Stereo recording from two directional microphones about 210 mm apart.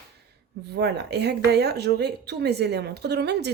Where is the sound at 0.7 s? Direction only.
50° right (ahead or behind).